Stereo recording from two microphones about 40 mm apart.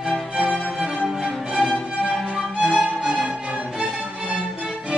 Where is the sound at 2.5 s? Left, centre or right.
Right.